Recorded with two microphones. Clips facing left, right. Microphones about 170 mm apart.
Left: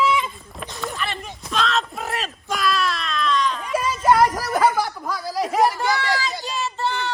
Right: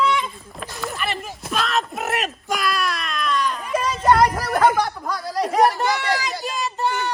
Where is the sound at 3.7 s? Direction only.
5° left (ahead or behind).